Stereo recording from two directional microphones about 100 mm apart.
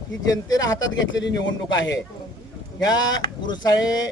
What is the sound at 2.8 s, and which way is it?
Speech, 40° left (ahead or behind).